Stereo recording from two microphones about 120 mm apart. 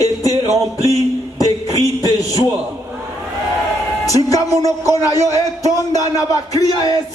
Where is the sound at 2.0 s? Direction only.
30° left (ahead or behind).